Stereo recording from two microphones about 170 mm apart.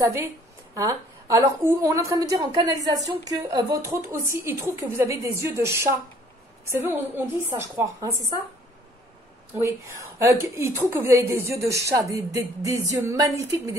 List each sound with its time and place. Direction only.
0.0 s a woman's voice: 15° right (ahead or behind)
9.5 s a woman's voice: 15° right (ahead or behind)